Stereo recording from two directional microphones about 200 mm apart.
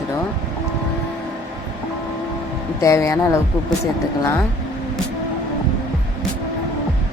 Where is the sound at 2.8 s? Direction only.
15° left (ahead or behind).